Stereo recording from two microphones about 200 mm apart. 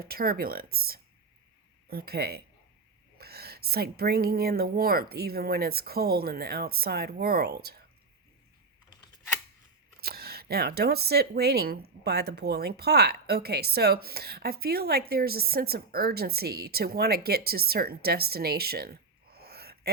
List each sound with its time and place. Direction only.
0.0 s speech: 50° right (ahead or behind)
10.0 s speech: 50° right (ahead or behind)